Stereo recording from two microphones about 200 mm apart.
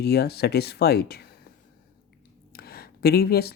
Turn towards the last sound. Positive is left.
turn(degrees=50)  # may be behind; listen again after turning